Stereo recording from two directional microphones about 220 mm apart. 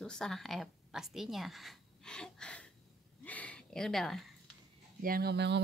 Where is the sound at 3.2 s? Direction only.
5° left (ahead or behind).